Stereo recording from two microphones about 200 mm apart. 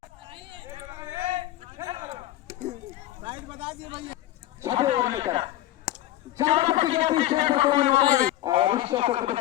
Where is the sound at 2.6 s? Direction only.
40° right (ahead or behind).